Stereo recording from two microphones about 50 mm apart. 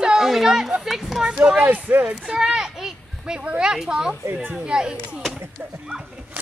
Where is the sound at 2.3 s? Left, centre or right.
Centre.